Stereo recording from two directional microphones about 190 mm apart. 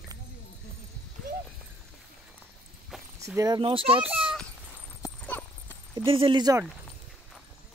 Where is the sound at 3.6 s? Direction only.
30° right (ahead or behind).